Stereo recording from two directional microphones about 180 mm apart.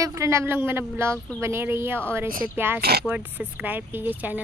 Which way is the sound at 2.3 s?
50° right (ahead or behind).